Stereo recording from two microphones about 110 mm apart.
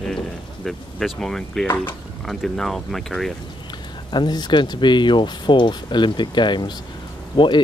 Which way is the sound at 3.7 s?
45° left (ahead or behind).